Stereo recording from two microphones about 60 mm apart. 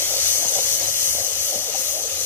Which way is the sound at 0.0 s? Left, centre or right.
Left.